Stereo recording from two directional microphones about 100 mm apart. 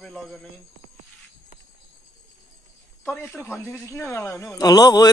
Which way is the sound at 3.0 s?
20° left (ahead or behind).